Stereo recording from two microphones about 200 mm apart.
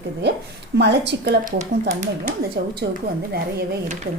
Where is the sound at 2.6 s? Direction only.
55° right (ahead or behind).